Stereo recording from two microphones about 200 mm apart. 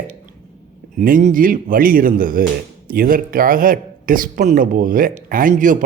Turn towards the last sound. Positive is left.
turn(degrees=-40)  # may be behind; listen again after turning